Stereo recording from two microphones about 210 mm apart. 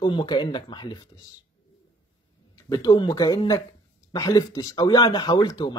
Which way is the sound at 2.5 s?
20° left (ahead or behind).